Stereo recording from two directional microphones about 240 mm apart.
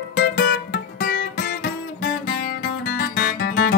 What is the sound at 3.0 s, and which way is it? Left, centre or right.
Guitar, left.